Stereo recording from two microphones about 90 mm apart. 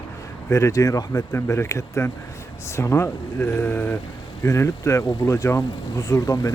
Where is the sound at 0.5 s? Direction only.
35° left (ahead or behind).